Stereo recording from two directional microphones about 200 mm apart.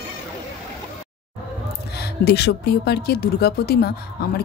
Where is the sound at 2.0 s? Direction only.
55° left (ahead or behind).